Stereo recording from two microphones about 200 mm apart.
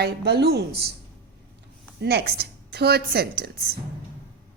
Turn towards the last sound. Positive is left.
turn(degrees=-50)  # may be behind; listen again after turning